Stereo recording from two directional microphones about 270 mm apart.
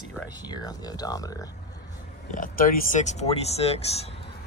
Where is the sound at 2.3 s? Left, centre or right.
Left.